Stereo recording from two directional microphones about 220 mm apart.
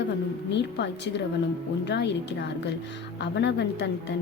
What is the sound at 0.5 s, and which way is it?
A woman's voice, 50° left (ahead or behind).